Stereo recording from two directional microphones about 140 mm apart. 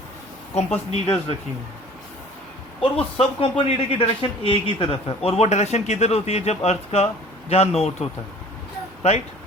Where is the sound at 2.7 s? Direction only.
45° left (ahead or behind).